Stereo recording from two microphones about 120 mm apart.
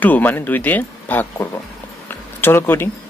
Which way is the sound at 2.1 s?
20° left (ahead or behind).